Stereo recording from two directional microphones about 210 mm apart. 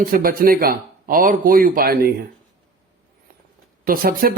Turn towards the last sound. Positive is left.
turn(degrees=-45)  # may be behind; listen again after turning